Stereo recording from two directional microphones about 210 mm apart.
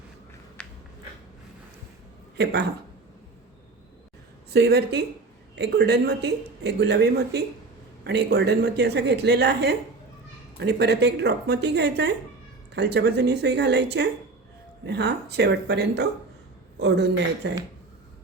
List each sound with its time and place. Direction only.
0.6 s a sound: 5° left (ahead or behind)
2.3 s speech: 55° right (ahead or behind)
4.5 s speech: 50° right (ahead or behind)